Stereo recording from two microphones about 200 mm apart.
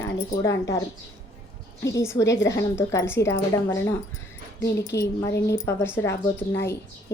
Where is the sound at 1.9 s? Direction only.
15° left (ahead or behind).